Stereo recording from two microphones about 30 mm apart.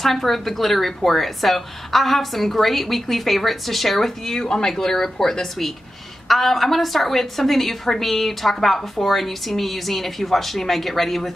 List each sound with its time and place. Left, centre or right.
0.0 s a woman's voice: centre
4.4 s speech: left
6.2 s a woman's voice: centre